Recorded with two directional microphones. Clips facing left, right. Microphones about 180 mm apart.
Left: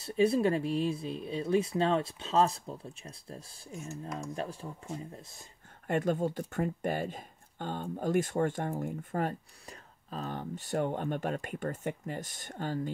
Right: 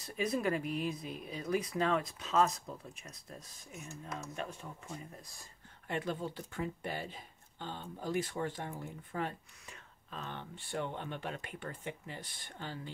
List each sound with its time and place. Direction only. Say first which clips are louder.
0.0 s speech: left 8 dB; 30° left (ahead or behind)
5.9 s speech: left 8 dB; 45° left (ahead or behind)